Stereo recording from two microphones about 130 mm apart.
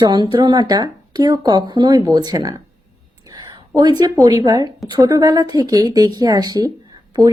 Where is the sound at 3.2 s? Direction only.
30° right (ahead or behind).